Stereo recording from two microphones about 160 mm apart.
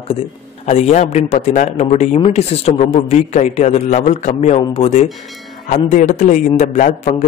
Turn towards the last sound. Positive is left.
turn(degrees=50)  # may be behind; listen again after turning